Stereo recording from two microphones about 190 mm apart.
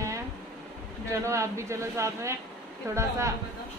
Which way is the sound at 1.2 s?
15° right (ahead or behind).